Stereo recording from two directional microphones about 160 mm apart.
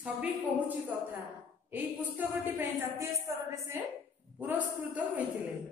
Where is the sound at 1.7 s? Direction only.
10° right (ahead or behind).